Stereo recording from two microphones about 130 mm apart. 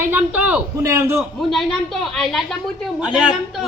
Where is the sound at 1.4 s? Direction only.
Centre (ahead or behind).